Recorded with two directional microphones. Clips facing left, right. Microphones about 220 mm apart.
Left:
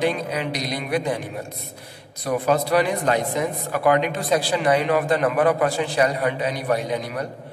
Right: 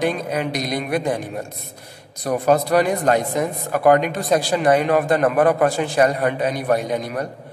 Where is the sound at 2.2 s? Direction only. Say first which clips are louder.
Right 3 dB; 45° right (ahead or behind).